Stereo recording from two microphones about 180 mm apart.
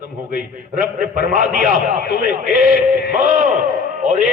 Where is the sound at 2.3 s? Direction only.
45° right (ahead or behind).